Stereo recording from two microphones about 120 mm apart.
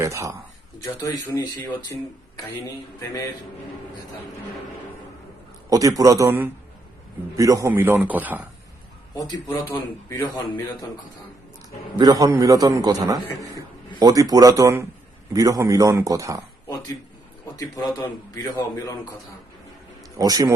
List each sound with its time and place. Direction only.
0.0 s a man's voice: 25° right (ahead or behind)
0.8 s speech: 35° left (ahead or behind)
5.6 s a man's voice: 30° right (ahead or behind)
7.3 s a man's voice: 25° right (ahead or behind)
7.7 s speech: 15° right (ahead or behind)
9.1 s a man's voice: 35° left (ahead or behind)
11.9 s a man's voice: 35° right (ahead or behind)
17.4 s a man's voice: 30° left (ahead or behind)
20.1 s a man's voice: 30° right (ahead or behind)